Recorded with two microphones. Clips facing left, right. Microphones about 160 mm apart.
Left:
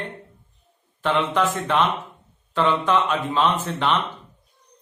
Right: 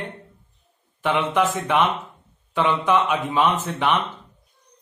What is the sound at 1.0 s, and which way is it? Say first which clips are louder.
A man's voice: even; 15° right (ahead or behind).